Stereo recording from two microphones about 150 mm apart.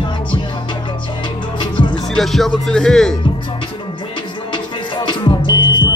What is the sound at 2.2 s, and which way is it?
Music, centre (ahead or behind).